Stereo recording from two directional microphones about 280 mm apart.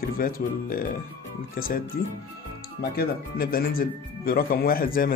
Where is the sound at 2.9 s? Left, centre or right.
Left.